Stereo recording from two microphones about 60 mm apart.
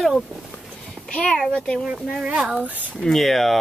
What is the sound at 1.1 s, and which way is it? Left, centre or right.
Speech, centre.